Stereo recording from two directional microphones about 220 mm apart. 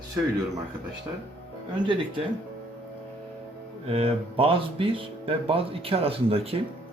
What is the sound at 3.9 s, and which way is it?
Speech, 25° right (ahead or behind).